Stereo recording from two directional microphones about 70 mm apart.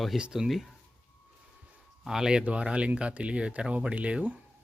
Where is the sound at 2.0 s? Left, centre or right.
Centre.